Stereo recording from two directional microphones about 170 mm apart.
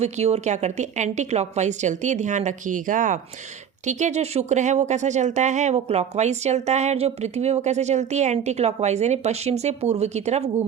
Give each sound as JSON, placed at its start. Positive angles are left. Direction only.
{"t": 0.0, "sound": "a woman's voice", "side_deg": -40}